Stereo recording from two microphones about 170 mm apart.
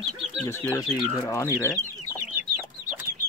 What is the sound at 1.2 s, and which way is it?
Speech, 20° left (ahead or behind).